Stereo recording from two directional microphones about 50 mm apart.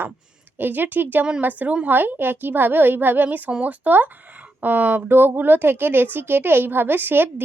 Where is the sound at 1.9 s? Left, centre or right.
Right.